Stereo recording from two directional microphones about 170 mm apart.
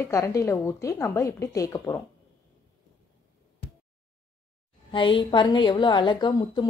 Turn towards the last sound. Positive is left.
turn(degrees=25)  # may be behind; listen again after turning